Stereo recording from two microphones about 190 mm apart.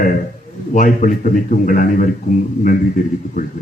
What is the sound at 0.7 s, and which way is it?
A man's voice, 40° left (ahead or behind).